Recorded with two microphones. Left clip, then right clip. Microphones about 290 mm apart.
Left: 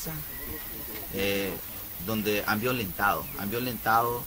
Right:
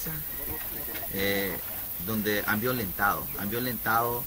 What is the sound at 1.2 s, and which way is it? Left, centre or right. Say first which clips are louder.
Speech: even; centre.